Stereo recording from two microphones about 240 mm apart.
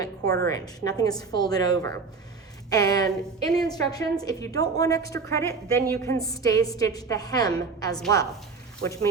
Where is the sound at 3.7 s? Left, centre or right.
Centre.